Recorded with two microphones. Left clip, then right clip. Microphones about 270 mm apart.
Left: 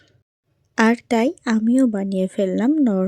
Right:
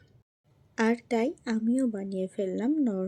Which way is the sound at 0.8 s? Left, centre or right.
Left.